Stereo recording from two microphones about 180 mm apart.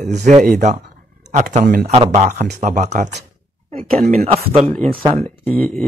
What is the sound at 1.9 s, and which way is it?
A man's voice, 35° right (ahead or behind).